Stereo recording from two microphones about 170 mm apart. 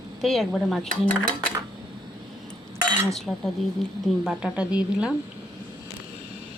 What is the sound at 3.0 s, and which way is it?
Speech, centre (ahead or behind).